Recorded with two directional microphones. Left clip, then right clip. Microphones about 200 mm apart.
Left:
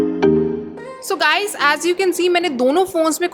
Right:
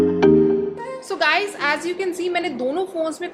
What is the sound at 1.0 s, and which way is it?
A woman's voice, 40° left (ahead or behind).